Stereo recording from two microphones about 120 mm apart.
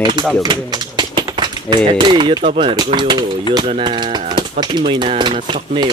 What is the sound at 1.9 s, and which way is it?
Speech, 40° right (ahead or behind).